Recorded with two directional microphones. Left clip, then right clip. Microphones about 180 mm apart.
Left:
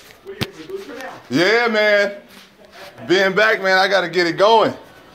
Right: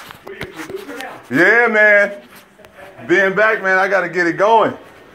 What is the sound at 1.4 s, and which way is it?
Speech, 10° left (ahead or behind).